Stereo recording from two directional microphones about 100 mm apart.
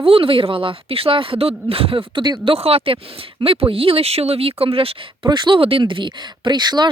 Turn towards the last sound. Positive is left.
turn(degrees=-45)  # may be behind; listen again after turning